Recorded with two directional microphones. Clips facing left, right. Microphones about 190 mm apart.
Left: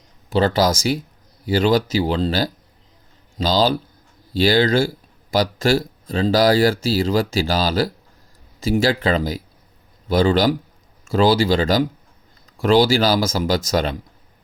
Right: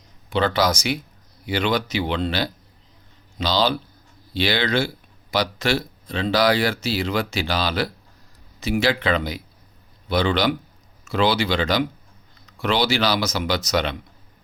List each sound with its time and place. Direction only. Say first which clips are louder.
0.3 s speech: left 3 dB; 40° left (ahead or behind)